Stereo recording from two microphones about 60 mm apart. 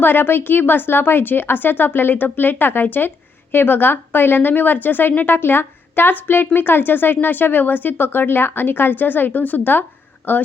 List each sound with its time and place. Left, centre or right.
0.0 s a woman's voice: left